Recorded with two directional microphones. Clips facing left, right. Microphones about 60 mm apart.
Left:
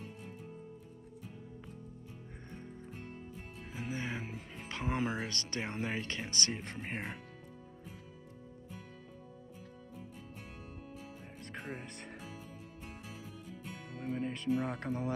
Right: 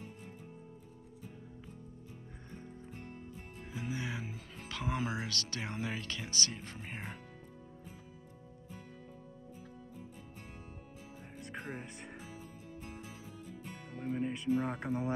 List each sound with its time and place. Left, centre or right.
3.7 s music: left
5.2 s speech: left
11.3 s music: centre
14.1 s music: centre
14.9 s speech: right